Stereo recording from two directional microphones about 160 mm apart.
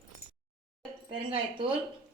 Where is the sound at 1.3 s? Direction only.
35° right (ahead or behind).